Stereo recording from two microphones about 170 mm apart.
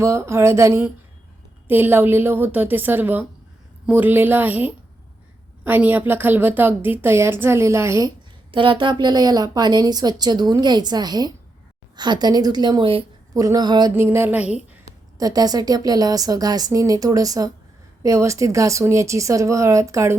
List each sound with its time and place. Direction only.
0.0 s a woman's voice: 15° right (ahead or behind)
8.5 s a woman's voice: 30° right (ahead or behind)
13.3 s a woman's voice: 20° right (ahead or behind)
15.2 s a woman's voice: 20° right (ahead or behind)